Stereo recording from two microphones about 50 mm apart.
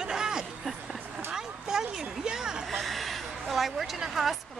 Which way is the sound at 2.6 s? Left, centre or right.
Centre.